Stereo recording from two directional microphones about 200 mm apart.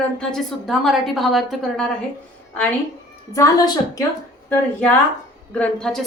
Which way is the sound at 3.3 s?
15° left (ahead or behind).